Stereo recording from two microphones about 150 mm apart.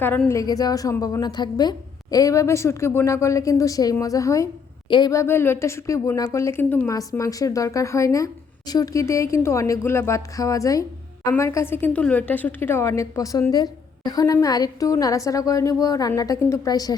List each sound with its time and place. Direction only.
0.0 s a woman's voice: 15° left (ahead or behind)
6.9 s a woman's voice: 25° left (ahead or behind)